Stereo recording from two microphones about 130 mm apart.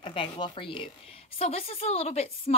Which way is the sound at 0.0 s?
40° left (ahead or behind).